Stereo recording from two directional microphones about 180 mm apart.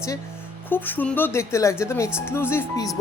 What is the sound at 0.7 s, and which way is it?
Speech, 10° left (ahead or behind).